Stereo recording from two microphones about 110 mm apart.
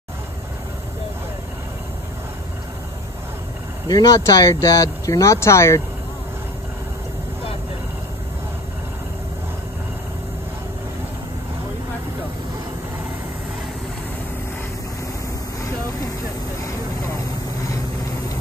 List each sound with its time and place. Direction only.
3.8 s speech: 35° left (ahead or behind)